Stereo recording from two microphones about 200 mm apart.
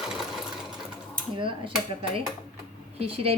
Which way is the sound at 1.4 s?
25° right (ahead or behind).